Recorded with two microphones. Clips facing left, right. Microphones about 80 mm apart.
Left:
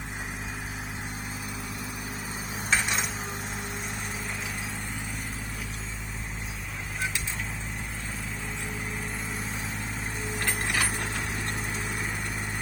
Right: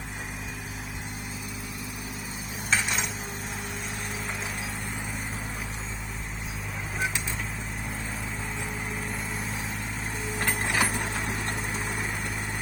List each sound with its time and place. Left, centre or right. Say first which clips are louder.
10.4 s vehicle: right 3 dB; right